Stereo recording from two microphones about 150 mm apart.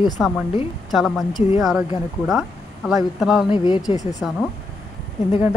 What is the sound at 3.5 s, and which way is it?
Speech, 30° left (ahead or behind).